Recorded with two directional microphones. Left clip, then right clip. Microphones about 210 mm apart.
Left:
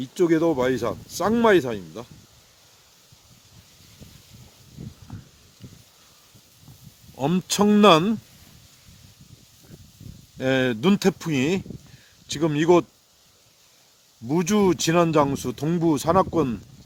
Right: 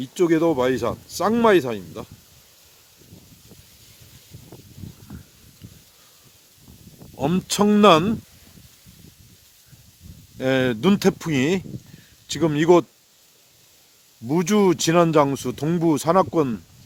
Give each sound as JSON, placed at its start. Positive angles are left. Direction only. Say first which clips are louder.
{"t": 0.0, "sound": "speech", "louder": "right 1 dB", "side_deg": -5}
{"t": 7.2, "sound": "speech", "louder": "right 1 dB", "side_deg": 5}
{"t": 10.3, "sound": "speech", "louder": "right 1 dB", "side_deg": 0}
{"t": 14.3, "sound": "speech", "louder": "right 2 dB", "side_deg": -10}